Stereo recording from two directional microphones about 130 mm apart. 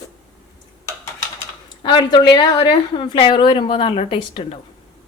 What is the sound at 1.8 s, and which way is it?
A woman's voice, 35° left (ahead or behind).